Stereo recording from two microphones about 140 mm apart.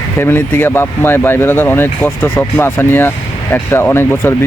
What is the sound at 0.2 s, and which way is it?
Speech, 15° left (ahead or behind).